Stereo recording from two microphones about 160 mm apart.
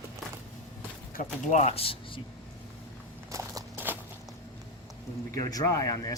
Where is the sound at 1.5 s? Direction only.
40° left (ahead or behind).